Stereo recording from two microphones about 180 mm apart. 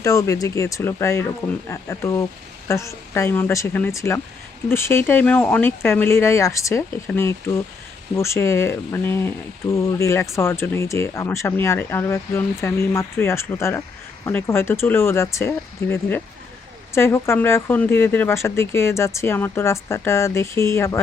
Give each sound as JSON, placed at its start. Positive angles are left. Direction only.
{"t": 0.0, "sound": "speech", "side_deg": 15}